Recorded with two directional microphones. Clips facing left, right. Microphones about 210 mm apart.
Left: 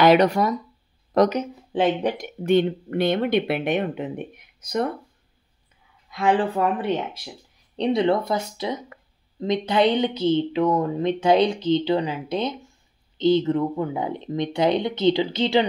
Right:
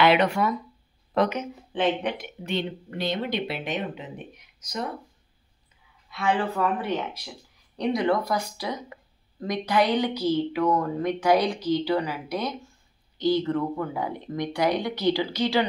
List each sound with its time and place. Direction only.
0.0 s speech: 40° left (ahead or behind); by 4.9 s 55° left (ahead or behind)
6.0 s speech: 35° left (ahead or behind)
7.7 s a woman's voice: 25° left (ahead or behind)